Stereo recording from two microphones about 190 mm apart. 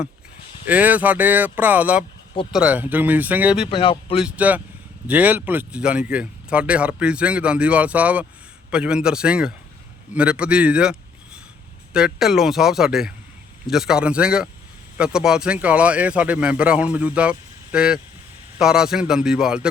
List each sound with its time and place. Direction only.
0.7 s speech: 10° right (ahead or behind)
3.7 s speech: 30° left (ahead or behind)
4.2 s speech: 5° right (ahead or behind)
11.9 s speech: 5° right (ahead or behind)